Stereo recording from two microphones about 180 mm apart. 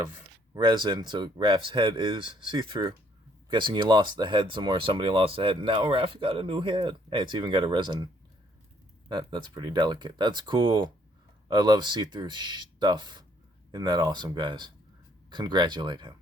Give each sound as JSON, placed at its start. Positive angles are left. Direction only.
{"t": 0.5, "sound": "speech", "side_deg": -25}